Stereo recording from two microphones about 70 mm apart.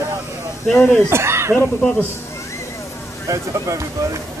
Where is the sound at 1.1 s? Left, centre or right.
Right.